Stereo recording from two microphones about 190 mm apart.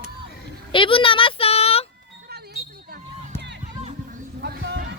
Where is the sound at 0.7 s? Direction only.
25° left (ahead or behind).